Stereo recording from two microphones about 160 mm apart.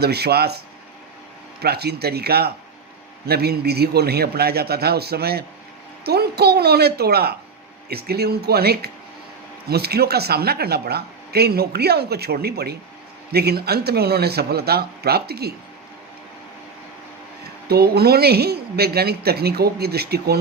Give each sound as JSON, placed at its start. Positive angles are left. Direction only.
{"t": 0.0, "sound": "a woman's voice", "side_deg": -90}
{"t": 1.6, "sound": "speech", "side_deg": -90}
{"t": 6.1, "sound": "a woman's voice", "side_deg": -90}
{"t": 17.7, "sound": "speech", "side_deg": -85}